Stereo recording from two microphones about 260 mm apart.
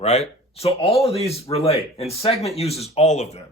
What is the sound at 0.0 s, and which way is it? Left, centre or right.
Speech, left.